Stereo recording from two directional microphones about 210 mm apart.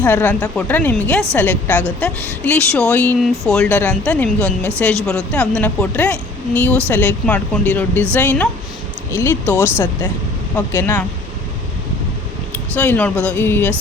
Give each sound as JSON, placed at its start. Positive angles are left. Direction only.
{"t": 0.0, "sound": "a woman's voice", "side_deg": 10}
{"t": 12.7, "sound": "a woman's voice", "side_deg": 10}